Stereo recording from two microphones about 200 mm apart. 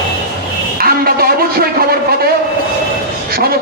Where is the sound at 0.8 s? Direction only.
50° right (ahead or behind).